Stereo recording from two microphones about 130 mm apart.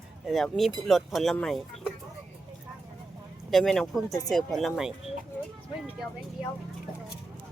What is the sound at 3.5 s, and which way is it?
A woman's voice, centre (ahead or behind).